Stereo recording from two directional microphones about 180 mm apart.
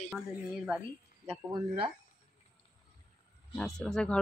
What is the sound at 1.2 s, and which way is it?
Speech, 25° right (ahead or behind).